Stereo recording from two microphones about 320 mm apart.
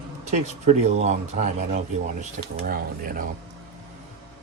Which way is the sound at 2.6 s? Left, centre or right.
Right.